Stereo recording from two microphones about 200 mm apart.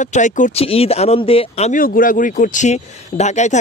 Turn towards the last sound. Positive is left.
turn(degrees=35)  # may be behind; listen again after turning